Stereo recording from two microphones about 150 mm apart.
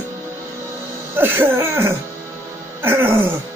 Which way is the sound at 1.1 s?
15° right (ahead or behind).